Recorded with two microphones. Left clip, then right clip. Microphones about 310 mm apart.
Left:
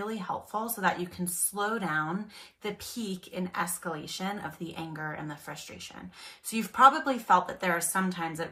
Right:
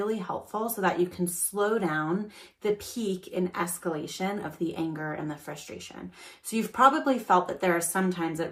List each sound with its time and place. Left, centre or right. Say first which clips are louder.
0.0 s speech: right 4 dB; centre
2.8 s speech: right 4 dB; left
3.1 s speech: right 9 dB; centre